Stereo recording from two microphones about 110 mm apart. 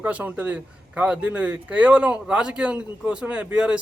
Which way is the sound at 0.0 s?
15° right (ahead or behind).